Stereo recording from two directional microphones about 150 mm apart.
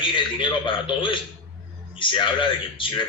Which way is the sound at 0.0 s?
35° left (ahead or behind).